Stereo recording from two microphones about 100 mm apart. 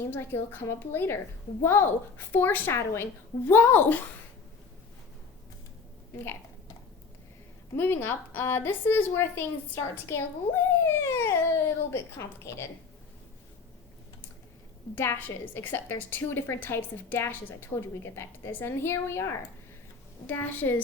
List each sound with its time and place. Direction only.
0.1 s a woman's voice: 20° left (ahead or behind)
7.8 s a woman's voice: 20° left (ahead or behind)
14.9 s a woman's voice: 25° left (ahead or behind)